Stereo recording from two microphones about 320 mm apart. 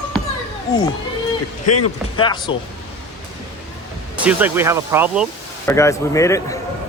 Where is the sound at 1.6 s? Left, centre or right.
Left.